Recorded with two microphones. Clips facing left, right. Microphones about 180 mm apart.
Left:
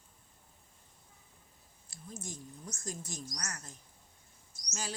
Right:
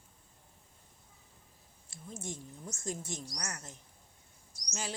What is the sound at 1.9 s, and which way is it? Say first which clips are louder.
Speech: right 3 dB; 25° right (ahead or behind).